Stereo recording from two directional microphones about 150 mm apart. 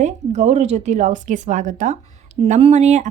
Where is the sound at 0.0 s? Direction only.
50° right (ahead or behind).